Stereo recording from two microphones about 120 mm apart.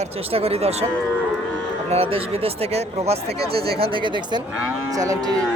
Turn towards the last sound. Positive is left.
turn(degrees=-30)  # may be behind; listen again after turning